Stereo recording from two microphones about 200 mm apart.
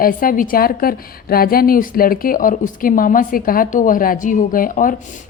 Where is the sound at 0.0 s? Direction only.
45° left (ahead or behind).